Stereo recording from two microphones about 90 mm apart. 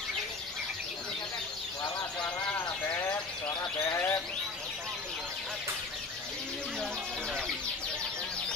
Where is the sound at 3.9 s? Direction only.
30° left (ahead or behind).